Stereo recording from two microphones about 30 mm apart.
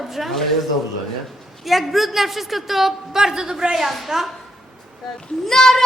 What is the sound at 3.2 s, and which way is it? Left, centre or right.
A woman's voice, right.